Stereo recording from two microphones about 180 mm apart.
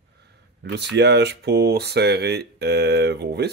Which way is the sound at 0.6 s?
70° right (ahead or behind).